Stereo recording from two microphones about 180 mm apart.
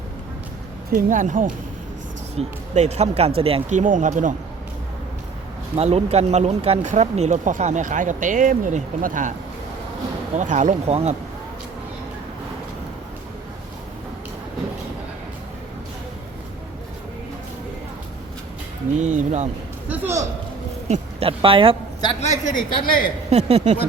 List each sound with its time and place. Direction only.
0.9 s speech: 45° right (ahead or behind)
5.7 s speech: 35° right (ahead or behind)
10.3 s speech: 40° right (ahead or behind)
18.9 s speech: 40° right (ahead or behind)
19.9 s a man's voice: 10° right (ahead or behind)
20.8 s speech: 35° right (ahead or behind)
22.2 s a woman's voice: 40° left (ahead or behind)
23.3 s speech: 35° right (ahead or behind)